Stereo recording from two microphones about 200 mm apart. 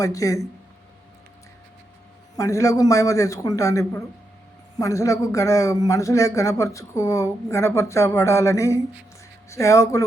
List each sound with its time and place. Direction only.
0.0 s a man's voice: 15° left (ahead or behind)
2.3 s a man's voice: 15° left (ahead or behind)